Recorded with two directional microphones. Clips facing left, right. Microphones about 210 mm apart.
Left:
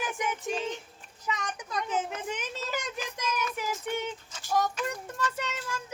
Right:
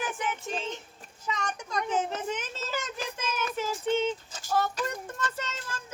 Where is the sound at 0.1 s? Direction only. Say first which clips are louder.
Left 1 dB; 15° left (ahead or behind).